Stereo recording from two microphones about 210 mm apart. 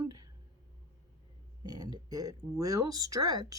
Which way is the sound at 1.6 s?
20° right (ahead or behind).